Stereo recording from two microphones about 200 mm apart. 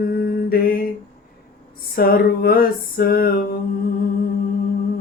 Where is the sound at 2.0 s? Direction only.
50° left (ahead or behind).